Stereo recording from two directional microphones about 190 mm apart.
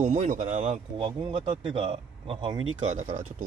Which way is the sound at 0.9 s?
25° right (ahead or behind).